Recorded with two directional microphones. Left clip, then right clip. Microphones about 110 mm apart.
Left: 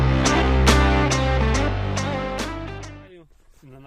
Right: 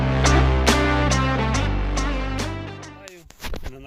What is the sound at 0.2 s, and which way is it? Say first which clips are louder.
Music: even; centre (ahead or behind).